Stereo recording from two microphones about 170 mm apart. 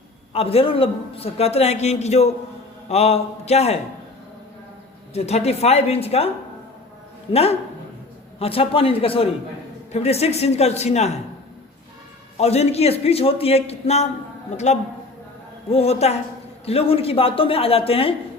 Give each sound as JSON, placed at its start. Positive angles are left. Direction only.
{"t": 0.3, "sound": "a man's voice", "side_deg": 35}
{"t": 5.1, "sound": "a man's voice", "side_deg": 40}
{"t": 12.4, "sound": "a man's voice", "side_deg": 40}